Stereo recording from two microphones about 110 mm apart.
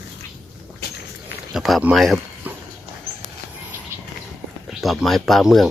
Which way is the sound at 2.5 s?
15° right (ahead or behind).